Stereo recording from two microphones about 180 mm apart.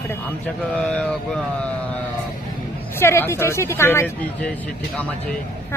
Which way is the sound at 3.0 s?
15° left (ahead or behind).